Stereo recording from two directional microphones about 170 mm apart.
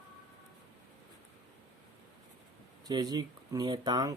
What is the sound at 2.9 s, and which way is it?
Speech, 25° right (ahead or behind).